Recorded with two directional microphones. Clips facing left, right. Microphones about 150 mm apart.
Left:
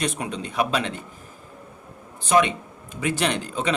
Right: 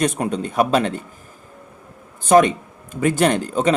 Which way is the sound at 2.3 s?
45° right (ahead or behind).